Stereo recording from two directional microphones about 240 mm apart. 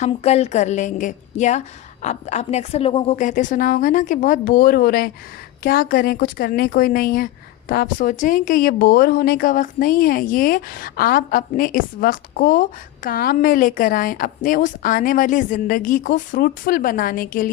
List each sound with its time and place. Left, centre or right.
0.0 s a woman's voice: left